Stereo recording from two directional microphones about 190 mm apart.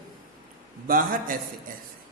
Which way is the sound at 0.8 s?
45° right (ahead or behind).